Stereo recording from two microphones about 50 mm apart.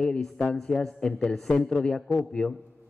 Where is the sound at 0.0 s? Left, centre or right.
Centre.